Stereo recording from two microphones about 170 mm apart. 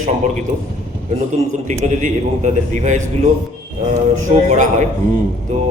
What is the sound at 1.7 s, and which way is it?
A man's voice, 45° right (ahead or behind).